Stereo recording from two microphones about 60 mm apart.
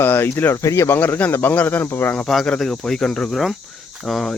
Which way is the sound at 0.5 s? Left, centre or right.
Left.